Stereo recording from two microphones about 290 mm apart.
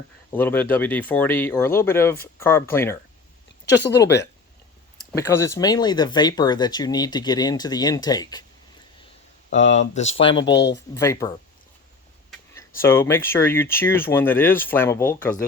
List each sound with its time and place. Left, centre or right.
0.3 s speech: centre
5.1 s speech: centre
9.5 s speech: left
10.5 s speech: left
10.9 s speech: centre
12.3 s speech: centre